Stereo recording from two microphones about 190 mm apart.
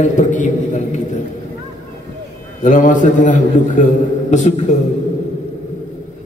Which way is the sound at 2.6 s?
40° left (ahead or behind).